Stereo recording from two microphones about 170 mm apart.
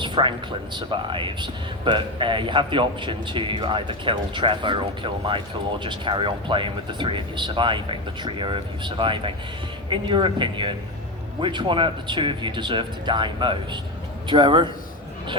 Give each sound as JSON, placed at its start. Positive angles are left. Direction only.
{"t": 0.0, "sound": "speech", "side_deg": -30}